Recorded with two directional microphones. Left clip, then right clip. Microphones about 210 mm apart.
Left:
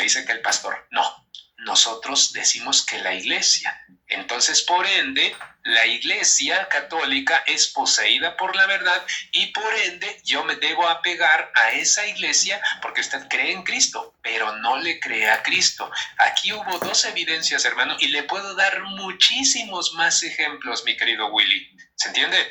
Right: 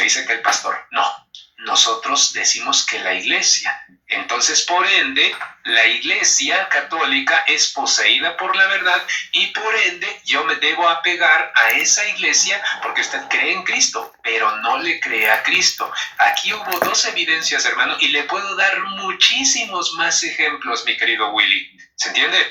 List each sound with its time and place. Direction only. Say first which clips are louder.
0.0 s speech: right 4 dB; 15° left (ahead or behind)
1.6 s speech: right 4 dB; 15° left (ahead or behind)